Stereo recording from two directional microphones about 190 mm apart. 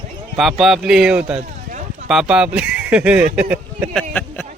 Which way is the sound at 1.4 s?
40° right (ahead or behind).